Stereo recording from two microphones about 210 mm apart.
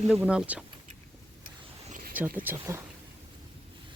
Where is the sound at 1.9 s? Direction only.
40° right (ahead or behind).